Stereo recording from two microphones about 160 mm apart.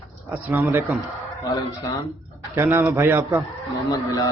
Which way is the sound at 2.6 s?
15° right (ahead or behind).